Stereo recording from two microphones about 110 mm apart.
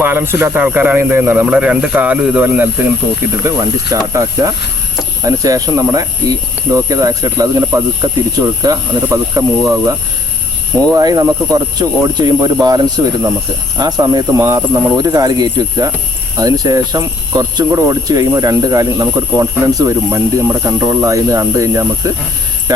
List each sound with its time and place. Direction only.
0.0 s speech: 20° right (ahead or behind)
3.4 s speech: 30° right (ahead or behind)
10.9 s speech: 35° right (ahead or behind)